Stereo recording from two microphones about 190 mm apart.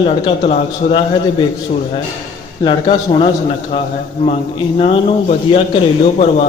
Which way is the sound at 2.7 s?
25° left (ahead or behind).